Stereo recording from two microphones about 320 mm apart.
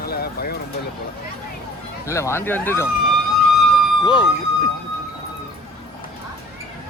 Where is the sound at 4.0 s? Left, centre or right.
Centre.